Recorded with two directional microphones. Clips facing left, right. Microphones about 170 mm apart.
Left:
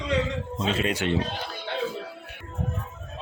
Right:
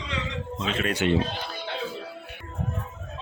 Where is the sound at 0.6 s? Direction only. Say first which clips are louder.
Left 2 dB; 35° left (ahead or behind).